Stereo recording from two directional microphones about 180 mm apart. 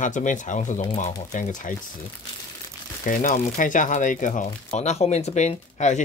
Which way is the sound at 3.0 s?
45° left (ahead or behind).